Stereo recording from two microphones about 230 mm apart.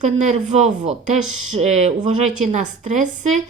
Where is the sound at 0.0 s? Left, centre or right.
Right.